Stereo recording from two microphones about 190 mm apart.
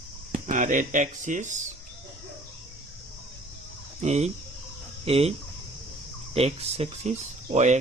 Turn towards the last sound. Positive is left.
turn(degrees=-35)  # may be behind; listen again after turning